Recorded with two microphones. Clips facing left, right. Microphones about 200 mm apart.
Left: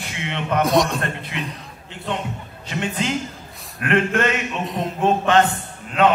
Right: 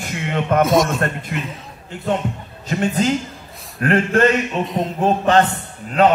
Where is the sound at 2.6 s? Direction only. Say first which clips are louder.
Right 6 dB; 40° right (ahead or behind).